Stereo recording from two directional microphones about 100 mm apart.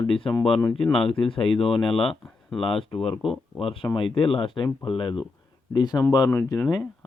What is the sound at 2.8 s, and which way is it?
Speech, 65° left (ahead or behind).